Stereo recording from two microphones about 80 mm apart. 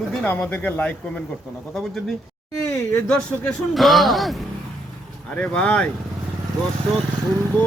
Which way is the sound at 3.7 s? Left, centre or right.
Centre.